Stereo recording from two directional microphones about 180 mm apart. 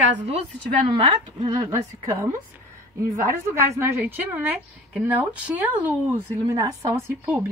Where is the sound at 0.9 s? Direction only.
25° right (ahead or behind).